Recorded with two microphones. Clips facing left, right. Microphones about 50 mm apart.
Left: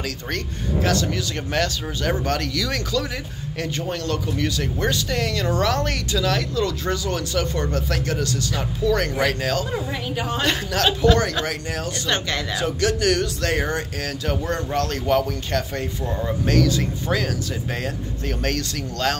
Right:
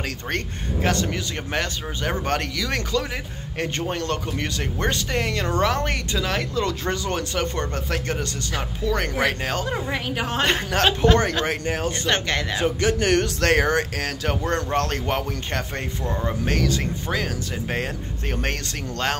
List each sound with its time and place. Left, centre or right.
0.8 s speech: right
9.7 s speech: right
10.4 s speech: right
12.1 s speech: right
12.6 s speech: right
13.1 s speech: right
14.0 s speech: right
18.4 s speech: right